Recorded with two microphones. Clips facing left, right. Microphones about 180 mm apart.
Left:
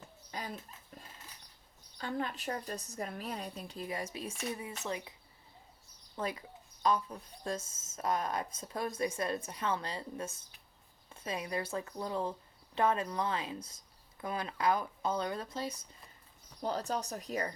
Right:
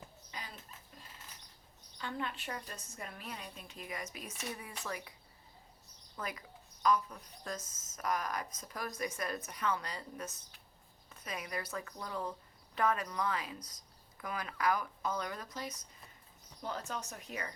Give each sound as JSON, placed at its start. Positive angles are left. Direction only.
{"t": 0.3, "sound": "dog", "side_deg": 45}
{"t": 2.0, "sound": "a woman's voice", "side_deg": 40}
{"t": 6.1, "sound": "a woman's voice", "side_deg": 30}